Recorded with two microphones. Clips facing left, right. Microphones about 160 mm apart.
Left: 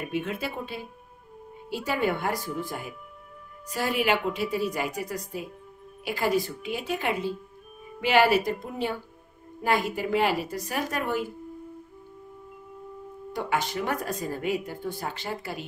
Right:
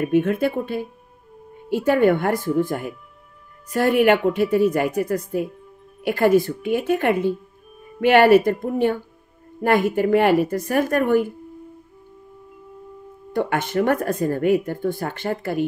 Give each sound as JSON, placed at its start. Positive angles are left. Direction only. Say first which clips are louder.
{"t": 0.0, "sound": "speech", "louder": "right 12 dB", "side_deg": -50}
{"t": 13.3, "sound": "speech", "louder": "right 6 dB", "side_deg": -55}